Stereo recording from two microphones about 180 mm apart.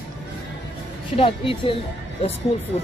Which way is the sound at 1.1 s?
30° left (ahead or behind).